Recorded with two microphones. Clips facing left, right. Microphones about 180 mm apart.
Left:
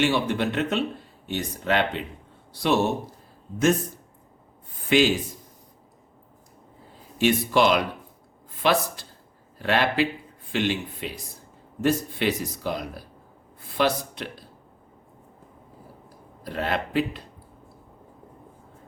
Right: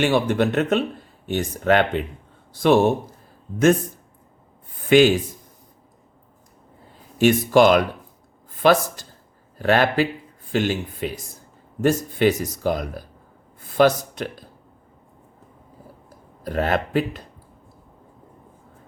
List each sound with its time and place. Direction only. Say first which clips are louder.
0.0 s speech: right 4 dB; 50° right (ahead or behind)
4.9 s speech: right 6 dB; 50° right (ahead or behind)
7.2 s speech: right 5 dB; 45° right (ahead or behind)
16.0 s speech: right 6 dB; 45° right (ahead or behind)